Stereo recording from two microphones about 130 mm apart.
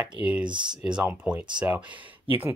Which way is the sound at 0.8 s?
10° right (ahead or behind).